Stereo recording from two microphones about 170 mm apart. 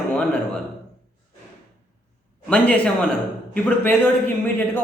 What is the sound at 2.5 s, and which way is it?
Speech, 5° left (ahead or behind).